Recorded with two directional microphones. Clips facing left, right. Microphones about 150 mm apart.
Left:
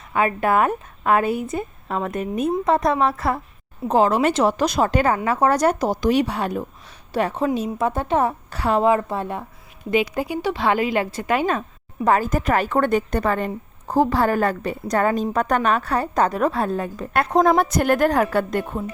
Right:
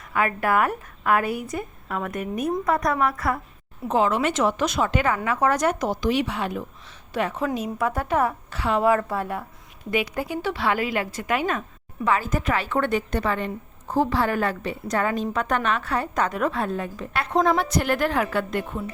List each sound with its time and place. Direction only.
0.1 s a woman's voice: 25° left (ahead or behind)
3.8 s a woman's voice: 35° left (ahead or behind)
8.4 s a woman's voice: 40° left (ahead or behind)
8.8 s a woman's voice: 20° left (ahead or behind)
12.0 s a woman's voice: 45° left (ahead or behind)